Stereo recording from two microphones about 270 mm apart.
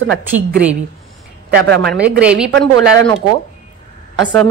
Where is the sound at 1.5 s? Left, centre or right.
Right.